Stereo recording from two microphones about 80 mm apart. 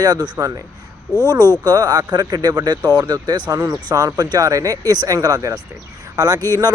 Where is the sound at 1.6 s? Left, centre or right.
Right.